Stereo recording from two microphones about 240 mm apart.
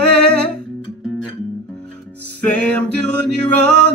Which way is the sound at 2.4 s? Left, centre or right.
Centre.